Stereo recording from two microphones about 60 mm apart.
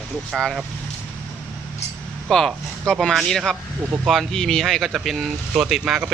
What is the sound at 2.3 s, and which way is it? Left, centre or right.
Speech, centre.